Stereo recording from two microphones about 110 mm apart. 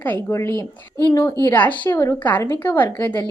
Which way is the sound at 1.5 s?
15° left (ahead or behind).